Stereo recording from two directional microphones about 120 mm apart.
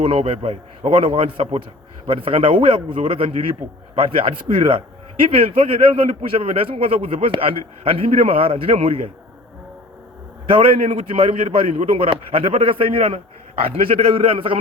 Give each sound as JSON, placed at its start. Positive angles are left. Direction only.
{"t": 0.0, "sound": "a man's voice", "side_deg": -55}
{"t": 2.0, "sound": "a man's voice", "side_deg": -50}
{"t": 10.8, "sound": "a man's voice", "side_deg": -75}
{"t": 11.2, "sound": "a man's voice", "side_deg": -55}